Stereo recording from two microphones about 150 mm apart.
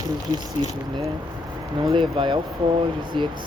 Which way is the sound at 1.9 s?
35° right (ahead or behind).